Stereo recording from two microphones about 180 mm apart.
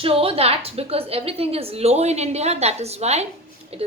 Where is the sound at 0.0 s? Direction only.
30° right (ahead or behind).